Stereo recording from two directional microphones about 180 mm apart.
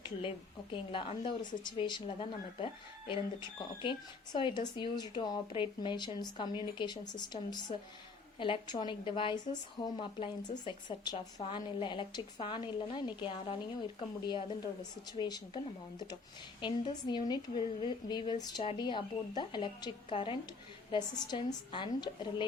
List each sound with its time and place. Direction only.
0.2 s a woman's voice: 30° left (ahead or behind)